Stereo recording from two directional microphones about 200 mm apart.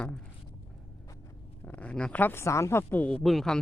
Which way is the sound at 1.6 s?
5° left (ahead or behind).